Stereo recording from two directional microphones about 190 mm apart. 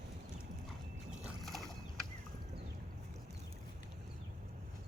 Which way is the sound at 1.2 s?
Centre (ahead or behind).